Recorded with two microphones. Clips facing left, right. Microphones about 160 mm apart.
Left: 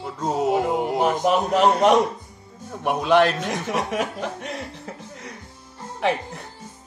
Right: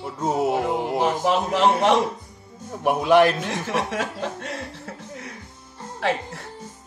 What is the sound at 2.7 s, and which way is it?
Speech, 10° right (ahead or behind).